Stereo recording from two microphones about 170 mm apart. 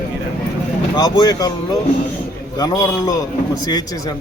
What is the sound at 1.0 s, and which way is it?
A man's voice, 25° left (ahead or behind).